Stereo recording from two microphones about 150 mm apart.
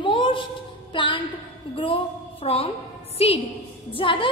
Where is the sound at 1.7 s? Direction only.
35° left (ahead or behind).